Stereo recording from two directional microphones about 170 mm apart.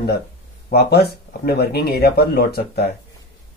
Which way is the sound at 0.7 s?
70° left (ahead or behind).